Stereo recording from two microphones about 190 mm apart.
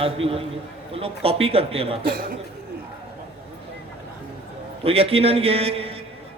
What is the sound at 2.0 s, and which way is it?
Speech, 55° right (ahead or behind).